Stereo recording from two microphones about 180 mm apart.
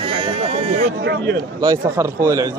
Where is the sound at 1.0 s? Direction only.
70° right (ahead or behind).